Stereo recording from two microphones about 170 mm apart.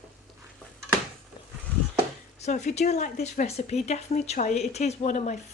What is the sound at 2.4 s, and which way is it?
A woman's voice, 45° left (ahead or behind).